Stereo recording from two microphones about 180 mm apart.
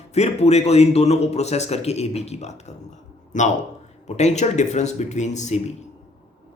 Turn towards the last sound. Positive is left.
turn(degrees=40)  # may be behind; listen again after turning